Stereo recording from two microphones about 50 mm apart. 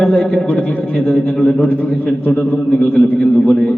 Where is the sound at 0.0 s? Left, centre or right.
Left.